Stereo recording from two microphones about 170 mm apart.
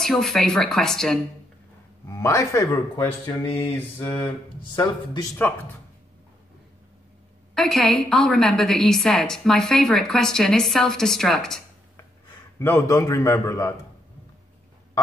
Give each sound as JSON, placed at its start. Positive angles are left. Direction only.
{"t": 0.0, "sound": "a woman's voice", "side_deg": 0}
{"t": 2.0, "sound": "speech", "side_deg": 20}
{"t": 4.7, "sound": "speech", "side_deg": 20}
{"t": 7.5, "sound": "a woman's voice", "side_deg": 5}
{"t": 12.5, "sound": "a man's voice", "side_deg": 15}